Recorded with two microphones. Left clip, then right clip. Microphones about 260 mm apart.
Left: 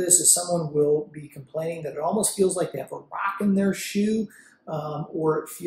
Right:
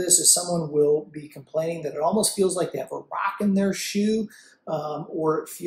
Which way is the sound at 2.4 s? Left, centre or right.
Centre.